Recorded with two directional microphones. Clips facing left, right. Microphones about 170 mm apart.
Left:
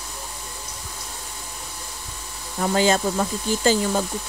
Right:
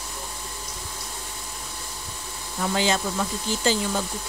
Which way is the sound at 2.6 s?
45° left (ahead or behind).